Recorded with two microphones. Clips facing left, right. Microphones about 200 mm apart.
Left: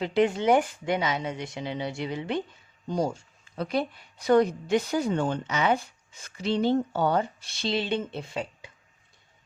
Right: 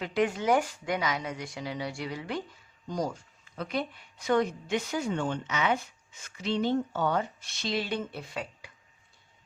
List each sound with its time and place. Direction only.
0.0 s a woman's voice: 25° left (ahead or behind)